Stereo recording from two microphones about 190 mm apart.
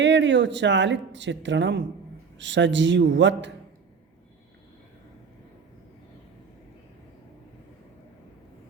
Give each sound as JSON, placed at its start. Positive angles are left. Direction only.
{"t": 0.0, "sound": "speech", "side_deg": -70}